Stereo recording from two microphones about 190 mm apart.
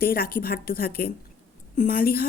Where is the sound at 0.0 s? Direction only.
50° left (ahead or behind).